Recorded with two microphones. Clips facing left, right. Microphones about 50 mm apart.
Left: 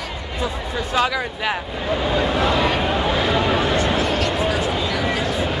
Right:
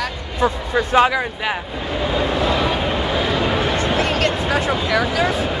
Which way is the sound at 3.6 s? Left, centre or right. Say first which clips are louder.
Even; right.